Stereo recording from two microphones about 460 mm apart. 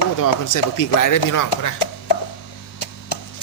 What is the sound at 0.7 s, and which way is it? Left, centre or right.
Speech, left.